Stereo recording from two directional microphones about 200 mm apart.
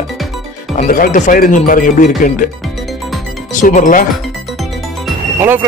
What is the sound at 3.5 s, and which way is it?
Speech, 40° left (ahead or behind).